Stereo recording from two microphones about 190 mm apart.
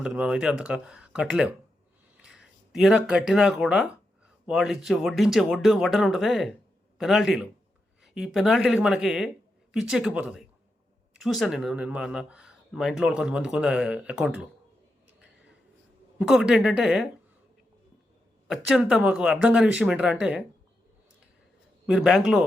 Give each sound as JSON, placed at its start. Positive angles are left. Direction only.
{"t": 0.0, "sound": "speech", "side_deg": -5}
{"t": 16.1, "sound": "speech", "side_deg": -5}
{"t": 18.4, "sound": "speech", "side_deg": 0}
{"t": 21.8, "sound": "speech", "side_deg": 0}